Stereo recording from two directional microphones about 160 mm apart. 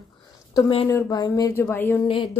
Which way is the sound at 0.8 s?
20° left (ahead or behind).